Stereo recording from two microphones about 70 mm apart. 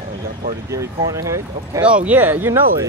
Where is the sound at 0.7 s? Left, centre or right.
Right.